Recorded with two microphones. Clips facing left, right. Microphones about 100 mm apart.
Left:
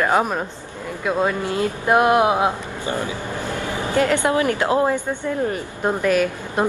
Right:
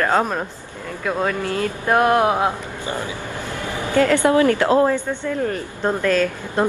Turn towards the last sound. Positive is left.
turn(degrees=15)  # may be behind; listen again after turning